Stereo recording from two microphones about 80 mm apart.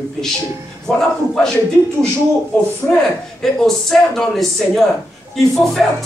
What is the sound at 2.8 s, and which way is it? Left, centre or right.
Speech, centre.